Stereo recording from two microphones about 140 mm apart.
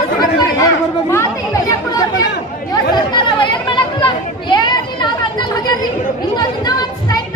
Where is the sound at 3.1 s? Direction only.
35° left (ahead or behind).